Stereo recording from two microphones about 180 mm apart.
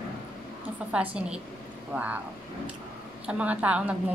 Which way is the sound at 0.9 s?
5° right (ahead or behind).